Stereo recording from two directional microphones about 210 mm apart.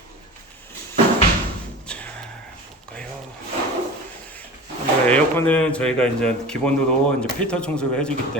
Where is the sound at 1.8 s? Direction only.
5° left (ahead or behind).